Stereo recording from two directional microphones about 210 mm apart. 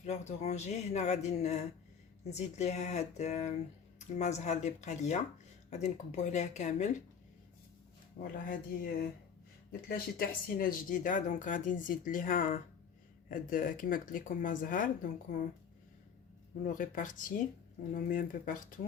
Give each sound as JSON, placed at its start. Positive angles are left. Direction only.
{"t": 0.0, "sound": "speech", "side_deg": 35}
{"t": 8.2, "sound": "speech", "side_deg": 40}
{"t": 16.6, "sound": "speech", "side_deg": 40}